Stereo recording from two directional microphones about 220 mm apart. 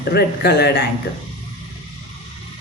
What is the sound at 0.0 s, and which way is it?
Speech, 45° left (ahead or behind).